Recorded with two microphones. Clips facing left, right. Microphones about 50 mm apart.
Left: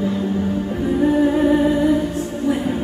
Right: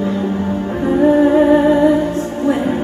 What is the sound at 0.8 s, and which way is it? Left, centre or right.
Music, right.